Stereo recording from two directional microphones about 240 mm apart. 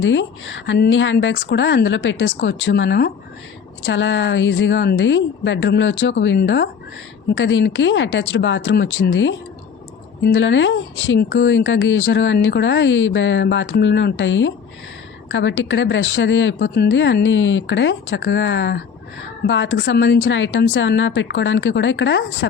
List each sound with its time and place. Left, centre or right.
0.0 s speech: left